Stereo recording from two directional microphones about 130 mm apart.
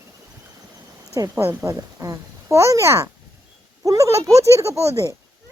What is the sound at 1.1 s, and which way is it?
A child's voice, 25° right (ahead or behind).